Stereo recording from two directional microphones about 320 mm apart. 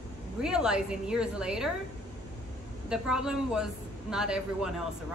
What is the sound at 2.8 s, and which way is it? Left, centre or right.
Speech, centre.